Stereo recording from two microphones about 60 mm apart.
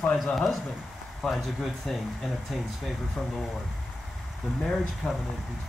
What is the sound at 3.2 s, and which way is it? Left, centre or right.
Speech, left.